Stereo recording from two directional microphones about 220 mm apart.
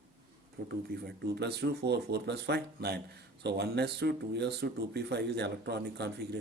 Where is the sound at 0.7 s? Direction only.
45° right (ahead or behind).